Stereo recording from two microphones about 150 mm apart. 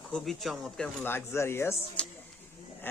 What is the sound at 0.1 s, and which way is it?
Speech, centre (ahead or behind).